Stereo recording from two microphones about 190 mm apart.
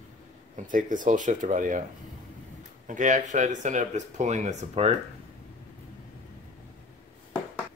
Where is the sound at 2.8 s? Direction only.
40° right (ahead or behind).